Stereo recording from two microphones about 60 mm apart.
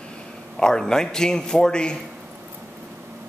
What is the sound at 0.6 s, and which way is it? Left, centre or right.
A man's voice, centre.